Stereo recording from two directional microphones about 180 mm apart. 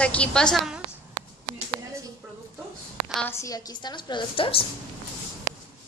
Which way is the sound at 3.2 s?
15° left (ahead or behind).